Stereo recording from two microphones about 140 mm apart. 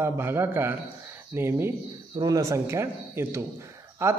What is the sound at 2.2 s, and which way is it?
A man's voice, 25° right (ahead or behind).